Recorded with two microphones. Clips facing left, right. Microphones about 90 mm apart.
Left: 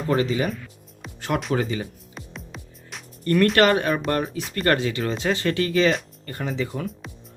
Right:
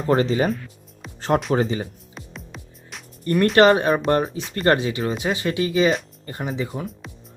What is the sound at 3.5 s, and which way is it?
Speech, 25° right (ahead or behind).